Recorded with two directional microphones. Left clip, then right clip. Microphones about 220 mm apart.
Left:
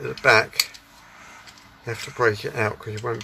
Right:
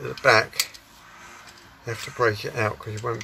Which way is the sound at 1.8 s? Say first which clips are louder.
Left 1 dB; 5° left (ahead or behind).